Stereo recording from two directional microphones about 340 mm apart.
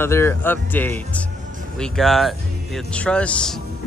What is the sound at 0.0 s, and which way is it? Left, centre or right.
Speech, centre.